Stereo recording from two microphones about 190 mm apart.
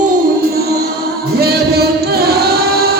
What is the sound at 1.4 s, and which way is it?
Music, 55° right (ahead or behind).